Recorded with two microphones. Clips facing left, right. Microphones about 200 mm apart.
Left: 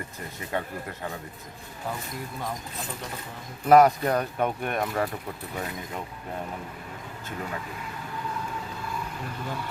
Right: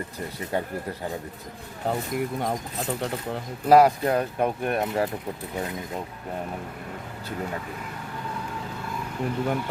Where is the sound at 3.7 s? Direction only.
30° right (ahead or behind).